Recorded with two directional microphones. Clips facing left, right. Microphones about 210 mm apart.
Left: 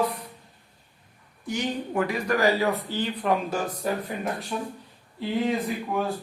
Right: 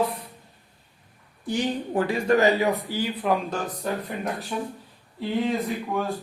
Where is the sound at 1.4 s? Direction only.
30° right (ahead or behind).